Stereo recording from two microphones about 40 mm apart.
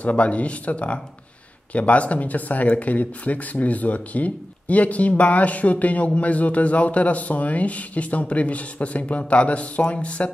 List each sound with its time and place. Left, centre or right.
0.0 s speech: left